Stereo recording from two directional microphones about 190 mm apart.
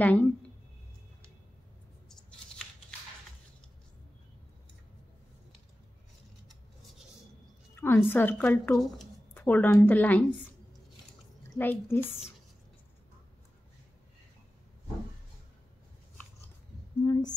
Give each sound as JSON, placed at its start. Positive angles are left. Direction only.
{"t": 0.0, "sound": "a woman's voice", "side_deg": 10}
{"t": 7.7, "sound": "a sound", "side_deg": 10}
{"t": 8.1, "sound": "a woman's voice", "side_deg": 10}
{"t": 11.5, "sound": "a woman's voice", "side_deg": 10}
{"t": 17.0, "sound": "speech", "side_deg": 20}